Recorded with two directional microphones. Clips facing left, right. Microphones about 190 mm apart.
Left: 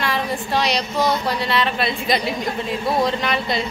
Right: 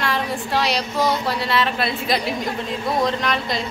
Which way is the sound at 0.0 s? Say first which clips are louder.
Even; centre (ahead or behind).